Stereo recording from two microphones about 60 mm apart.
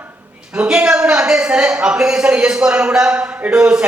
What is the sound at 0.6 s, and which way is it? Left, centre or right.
A man's voice, centre.